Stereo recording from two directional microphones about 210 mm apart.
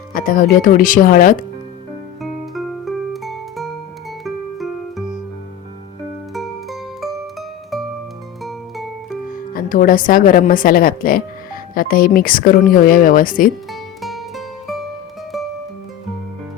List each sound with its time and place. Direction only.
0.1 s speech: 40° left (ahead or behind)
2.2 s music: centre (ahead or behind)
6.3 s music: centre (ahead or behind)
9.3 s speech: 40° left (ahead or behind)
13.7 s music: centre (ahead or behind)